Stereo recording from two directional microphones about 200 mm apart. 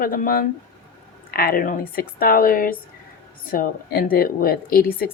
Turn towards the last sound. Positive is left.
turn(degrees=45)  # may be behind; listen again after turning